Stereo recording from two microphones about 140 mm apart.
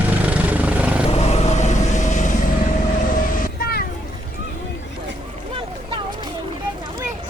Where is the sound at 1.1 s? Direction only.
50° left (ahead or behind).